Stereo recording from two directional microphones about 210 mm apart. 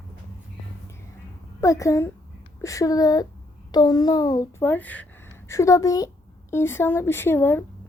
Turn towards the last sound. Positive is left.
turn(degrees=10)  # may be behind; listen again after turning